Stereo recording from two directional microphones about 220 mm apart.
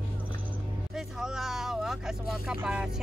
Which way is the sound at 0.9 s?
Centre (ahead or behind).